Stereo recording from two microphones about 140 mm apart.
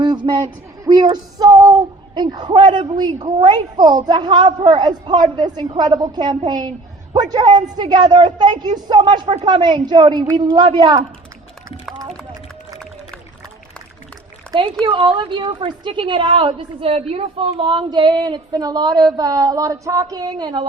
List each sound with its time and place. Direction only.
0.0 s a woman's voice: 30° right (ahead or behind)
14.5 s a woman's voice: 35° right (ahead or behind)